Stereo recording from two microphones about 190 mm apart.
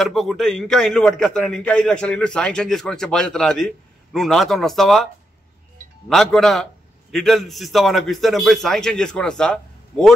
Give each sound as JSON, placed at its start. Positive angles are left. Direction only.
{"t": 0.0, "sound": "a man's voice", "side_deg": 0}
{"t": 6.0, "sound": "a man's voice", "side_deg": 0}